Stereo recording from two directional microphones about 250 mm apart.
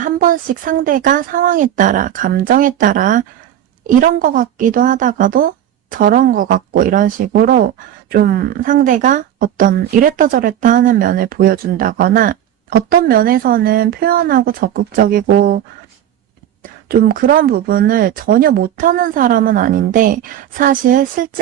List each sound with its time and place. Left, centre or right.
0.0 s a woman's voice: right
16.9 s a woman's voice: right